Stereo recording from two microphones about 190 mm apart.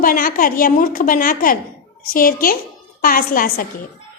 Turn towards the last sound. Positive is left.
turn(degrees=45)  # may be behind; listen again after turning